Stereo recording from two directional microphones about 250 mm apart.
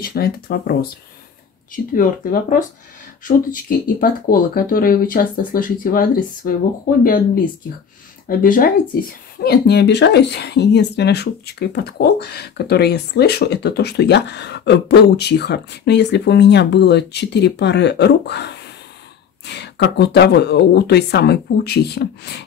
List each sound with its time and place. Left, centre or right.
0.0 s speech: left
2.0 s speech: left
8.3 s speech: left